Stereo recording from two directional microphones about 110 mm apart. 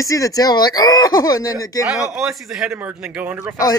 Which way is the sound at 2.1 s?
5° right (ahead or behind).